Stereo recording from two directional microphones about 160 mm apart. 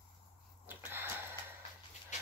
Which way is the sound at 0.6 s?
10° right (ahead or behind).